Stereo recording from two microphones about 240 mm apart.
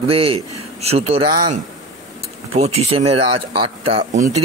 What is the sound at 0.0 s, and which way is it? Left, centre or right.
A man's voice, right.